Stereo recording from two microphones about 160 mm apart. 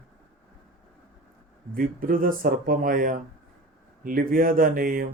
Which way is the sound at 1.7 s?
65° right (ahead or behind).